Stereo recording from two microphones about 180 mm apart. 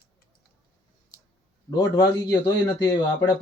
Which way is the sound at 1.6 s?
20° left (ahead or behind).